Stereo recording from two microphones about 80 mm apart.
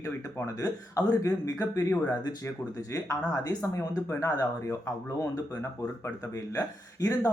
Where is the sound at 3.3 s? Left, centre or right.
Left.